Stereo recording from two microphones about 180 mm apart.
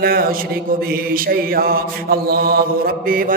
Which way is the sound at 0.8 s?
55° right (ahead or behind).